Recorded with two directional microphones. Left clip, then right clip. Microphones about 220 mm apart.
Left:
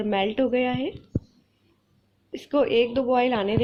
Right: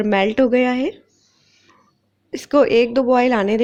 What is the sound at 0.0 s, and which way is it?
Speech, 50° right (ahead or behind).